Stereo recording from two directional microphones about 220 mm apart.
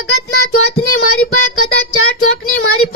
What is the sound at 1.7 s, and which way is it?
Speech, 45° left (ahead or behind).